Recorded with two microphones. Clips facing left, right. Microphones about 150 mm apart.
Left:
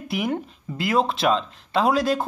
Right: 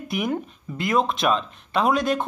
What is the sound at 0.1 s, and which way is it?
Speech, 30° left (ahead or behind).